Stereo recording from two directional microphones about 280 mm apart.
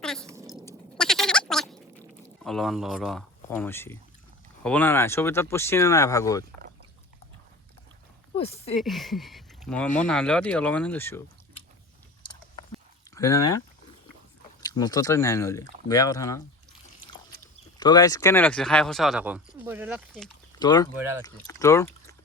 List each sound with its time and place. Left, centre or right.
0.0 s a sound: centre
0.6 s a sound: centre
2.4 s speech: centre
8.4 s speech: left
8.8 s speech: centre
13.1 s speech: centre
14.6 s speech: centre
17.7 s speech: centre
20.6 s speech: centre